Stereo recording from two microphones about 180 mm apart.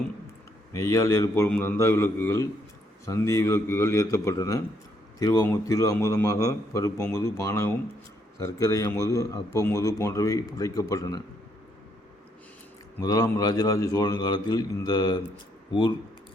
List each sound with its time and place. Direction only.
0.7 s a man's voice: 15° left (ahead or behind)
13.0 s a man's voice: 20° left (ahead or behind)